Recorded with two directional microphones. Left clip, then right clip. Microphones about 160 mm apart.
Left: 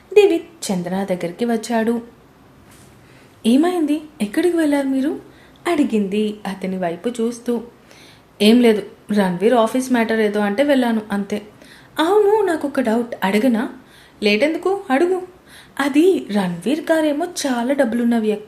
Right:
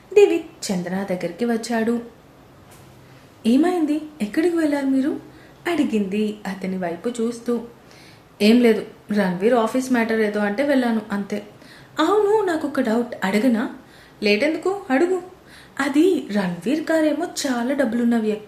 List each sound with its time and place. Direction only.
0.1 s a woman's voice: 25° left (ahead or behind)
3.4 s a woman's voice: 30° left (ahead or behind)